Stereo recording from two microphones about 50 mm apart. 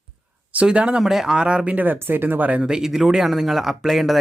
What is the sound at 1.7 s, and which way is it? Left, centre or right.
Speech, right.